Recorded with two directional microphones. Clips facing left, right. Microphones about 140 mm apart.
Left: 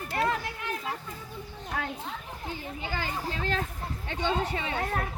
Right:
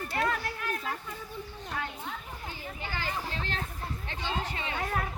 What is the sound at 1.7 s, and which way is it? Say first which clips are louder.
Children playing: left 3 dB; 90° left.